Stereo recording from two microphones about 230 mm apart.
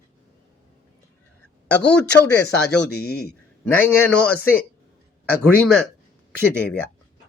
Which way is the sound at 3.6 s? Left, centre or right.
Centre.